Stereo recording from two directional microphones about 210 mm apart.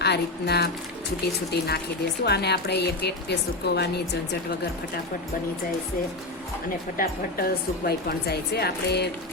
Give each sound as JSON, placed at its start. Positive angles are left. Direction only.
{"t": 0.0, "sound": "speech", "side_deg": 50}
{"t": 6.9, "sound": "speech", "side_deg": 45}